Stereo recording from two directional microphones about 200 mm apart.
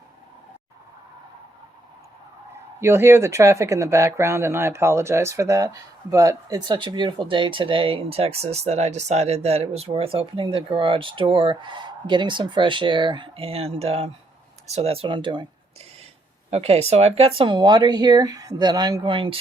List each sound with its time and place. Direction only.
2.8 s speech: 15° right (ahead or behind)
16.5 s speech: 30° right (ahead or behind)